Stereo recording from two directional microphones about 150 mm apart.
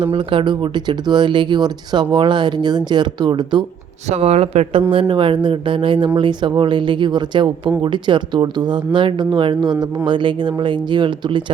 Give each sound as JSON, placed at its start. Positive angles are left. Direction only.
{"t": 0.0, "sound": "speech", "side_deg": -35}
{"t": 4.1, "sound": "speech", "side_deg": -45}